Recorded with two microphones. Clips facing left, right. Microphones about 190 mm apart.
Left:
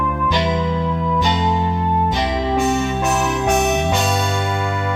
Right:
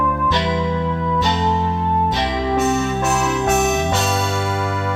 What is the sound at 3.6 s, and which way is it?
Music, 15° left (ahead or behind).